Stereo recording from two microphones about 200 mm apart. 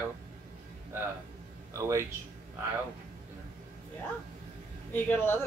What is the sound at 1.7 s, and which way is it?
Speech, 15° right (ahead or behind).